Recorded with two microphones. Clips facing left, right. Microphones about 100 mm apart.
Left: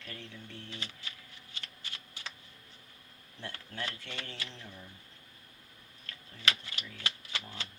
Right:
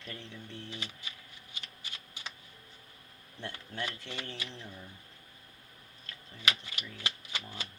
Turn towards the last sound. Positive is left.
turn(degrees=-15)  # may be behind; listen again after turning